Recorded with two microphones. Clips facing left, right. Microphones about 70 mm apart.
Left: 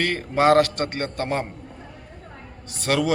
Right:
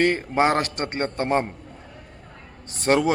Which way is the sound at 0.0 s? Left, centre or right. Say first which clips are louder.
Even; right.